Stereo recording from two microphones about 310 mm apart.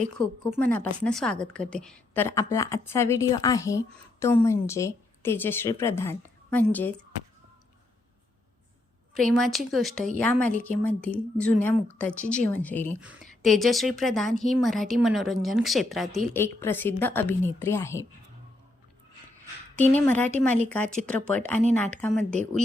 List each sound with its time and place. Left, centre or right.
0.5 s a woman's voice: centre
9.1 s a woman's voice: centre
20.1 s a woman's voice: centre